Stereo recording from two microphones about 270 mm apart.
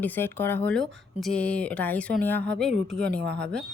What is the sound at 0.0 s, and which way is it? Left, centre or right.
Speech, centre.